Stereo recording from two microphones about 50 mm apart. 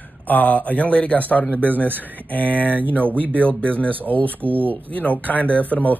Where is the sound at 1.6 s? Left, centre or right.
Right.